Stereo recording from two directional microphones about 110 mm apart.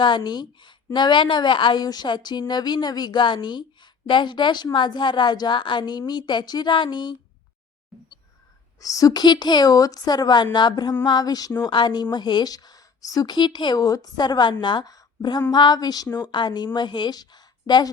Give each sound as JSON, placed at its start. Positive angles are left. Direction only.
{"t": 0.0, "sound": "a woman's voice", "side_deg": 45}
{"t": 8.8, "sound": "a woman's voice", "side_deg": 30}